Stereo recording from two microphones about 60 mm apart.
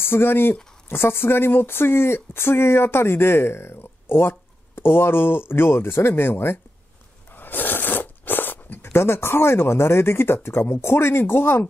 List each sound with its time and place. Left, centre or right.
0.0 s speech: left